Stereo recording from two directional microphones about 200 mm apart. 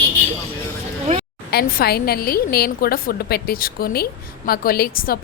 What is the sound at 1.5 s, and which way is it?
A woman's voice, 50° left (ahead or behind).